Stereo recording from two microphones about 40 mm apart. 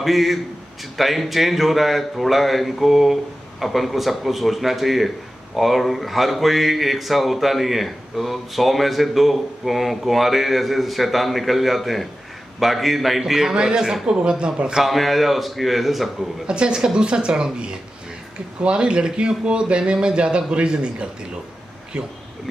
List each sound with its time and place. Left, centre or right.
0.0 s a man's voice: centre; by 14.8 s right
14.8 s speech: centre
16.4 s a man's voice: right